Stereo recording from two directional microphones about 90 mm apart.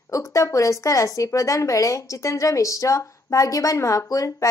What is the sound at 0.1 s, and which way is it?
Speech, 35° left (ahead or behind).